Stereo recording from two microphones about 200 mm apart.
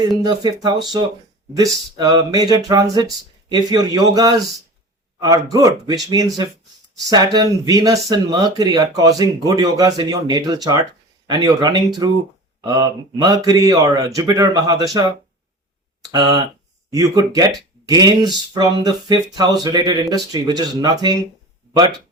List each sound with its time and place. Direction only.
0.2 s speech: 20° right (ahead or behind)
16.0 s speech: 20° right (ahead or behind)